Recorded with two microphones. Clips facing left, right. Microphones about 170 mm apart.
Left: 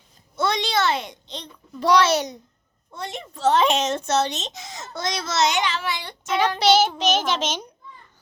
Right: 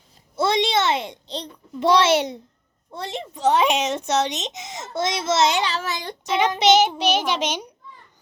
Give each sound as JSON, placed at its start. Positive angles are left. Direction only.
{"t": 0.3, "sound": "a child's voice", "side_deg": -25}
{"t": 3.3, "sound": "a child's voice", "side_deg": -15}
{"t": 6.2, "sound": "a child's voice", "side_deg": -20}